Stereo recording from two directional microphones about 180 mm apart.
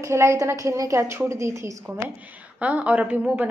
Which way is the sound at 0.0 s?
15° right (ahead or behind).